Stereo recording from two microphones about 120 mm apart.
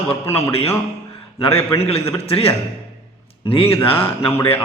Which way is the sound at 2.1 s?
55° left (ahead or behind).